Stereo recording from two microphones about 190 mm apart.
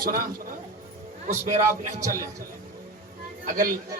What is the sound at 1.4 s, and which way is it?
Speech, 40° right (ahead or behind).